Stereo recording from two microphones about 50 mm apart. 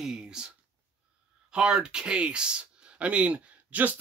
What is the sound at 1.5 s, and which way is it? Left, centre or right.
Speech, centre.